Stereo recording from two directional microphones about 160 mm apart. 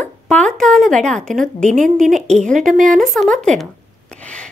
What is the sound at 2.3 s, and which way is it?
A woman's voice, 5° left (ahead or behind).